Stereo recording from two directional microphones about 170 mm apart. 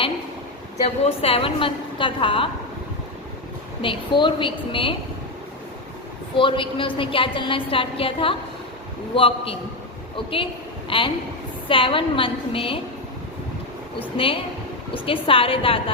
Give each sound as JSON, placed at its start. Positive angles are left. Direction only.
{"t": 1.0, "sound": "a woman's voice", "side_deg": 35}
{"t": 3.8, "sound": "a woman's voice", "side_deg": 30}
{"t": 6.3, "sound": "a woman's voice", "side_deg": 30}
{"t": 14.2, "sound": "a woman's voice", "side_deg": 30}